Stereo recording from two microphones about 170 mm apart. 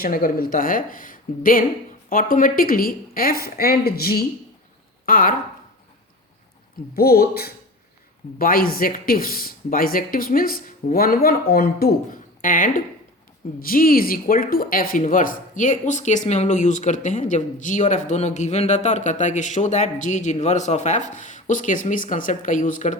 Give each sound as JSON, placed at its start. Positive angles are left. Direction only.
{"t": 0.0, "sound": "speech", "side_deg": 55}
{"t": 6.9, "sound": "speech", "side_deg": 65}